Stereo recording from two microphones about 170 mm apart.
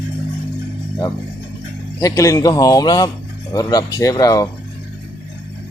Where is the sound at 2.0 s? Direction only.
20° left (ahead or behind).